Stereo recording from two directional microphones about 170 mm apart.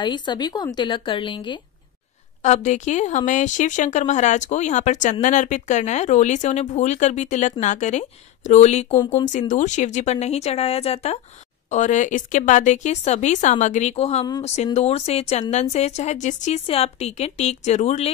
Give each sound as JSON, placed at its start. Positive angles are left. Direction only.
{"t": 0.0, "sound": "speech", "side_deg": 25}
{"t": 2.4, "sound": "a woman's voice", "side_deg": 45}